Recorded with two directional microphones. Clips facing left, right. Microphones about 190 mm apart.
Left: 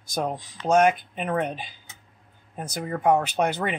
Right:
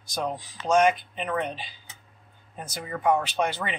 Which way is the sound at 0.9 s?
50° left (ahead or behind).